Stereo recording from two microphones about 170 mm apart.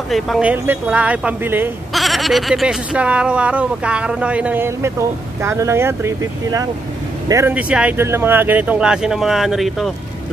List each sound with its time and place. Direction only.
0.1 s speech: 5° right (ahead or behind)
2.0 s speech: centre (ahead or behind)